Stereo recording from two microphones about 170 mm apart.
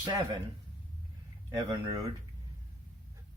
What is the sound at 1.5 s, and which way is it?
Speech, 20° right (ahead or behind).